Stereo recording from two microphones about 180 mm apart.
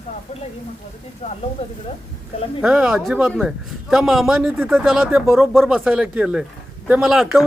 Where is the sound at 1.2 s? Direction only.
35° left (ahead or behind).